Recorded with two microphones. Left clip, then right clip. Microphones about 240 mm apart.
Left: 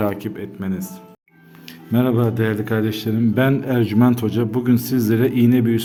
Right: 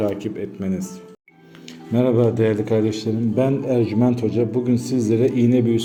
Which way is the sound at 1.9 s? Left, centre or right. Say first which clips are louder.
Right 2 dB; left.